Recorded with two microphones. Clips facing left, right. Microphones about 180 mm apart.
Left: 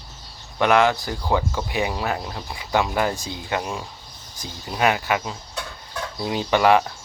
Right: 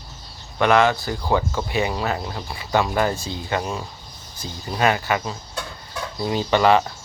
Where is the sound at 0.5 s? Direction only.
15° left (ahead or behind).